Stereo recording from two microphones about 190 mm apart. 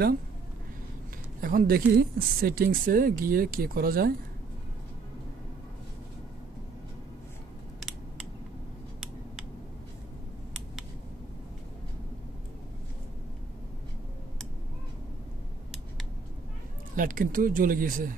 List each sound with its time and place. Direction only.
1.4 s speech: 50° right (ahead or behind)
16.9 s speech: 45° right (ahead or behind)